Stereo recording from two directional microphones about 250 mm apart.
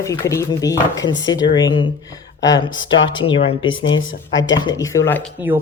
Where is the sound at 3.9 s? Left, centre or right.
Left.